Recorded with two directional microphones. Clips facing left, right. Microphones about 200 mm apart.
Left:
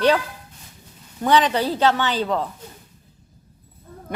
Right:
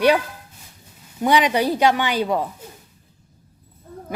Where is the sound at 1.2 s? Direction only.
10° right (ahead or behind).